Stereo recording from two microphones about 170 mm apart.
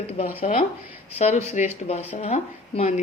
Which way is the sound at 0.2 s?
45° left (ahead or behind).